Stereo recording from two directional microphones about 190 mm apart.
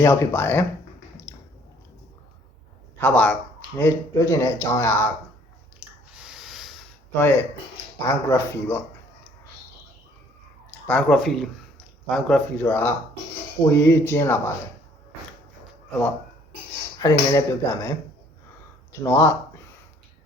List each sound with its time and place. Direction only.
0.0 s speech: 15° left (ahead or behind)
3.0 s speech: 5° left (ahead or behind)
5.8 s a sound: 5° right (ahead or behind)
7.1 s speech: 10° left (ahead or behind)
10.8 s speech: 5° left (ahead or behind)
17.0 s speech: 20° left (ahead or behind)